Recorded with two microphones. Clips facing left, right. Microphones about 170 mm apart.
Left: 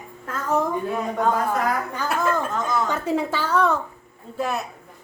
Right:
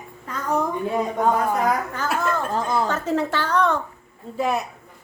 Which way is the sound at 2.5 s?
30° right (ahead or behind).